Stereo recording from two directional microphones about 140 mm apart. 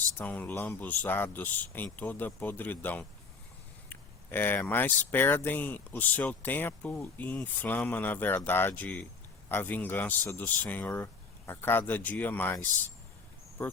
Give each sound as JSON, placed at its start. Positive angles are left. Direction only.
{"t": 0.2, "sound": "speech", "side_deg": 10}
{"t": 3.8, "sound": "a sound", "side_deg": 15}
{"t": 4.7, "sound": "speech", "side_deg": 15}
{"t": 13.6, "sound": "speech", "side_deg": 15}